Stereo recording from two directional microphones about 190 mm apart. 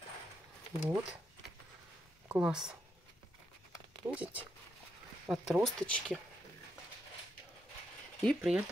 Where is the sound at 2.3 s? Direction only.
5° right (ahead or behind).